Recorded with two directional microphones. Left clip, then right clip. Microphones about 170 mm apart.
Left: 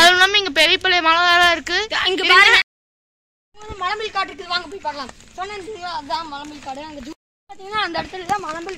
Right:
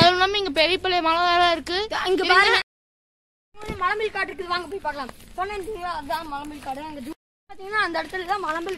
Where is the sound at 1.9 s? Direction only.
65° right (ahead or behind).